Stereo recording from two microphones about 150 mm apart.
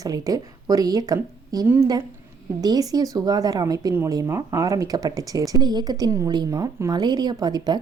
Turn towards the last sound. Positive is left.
turn(degrees=-25)  # may be behind; listen again after turning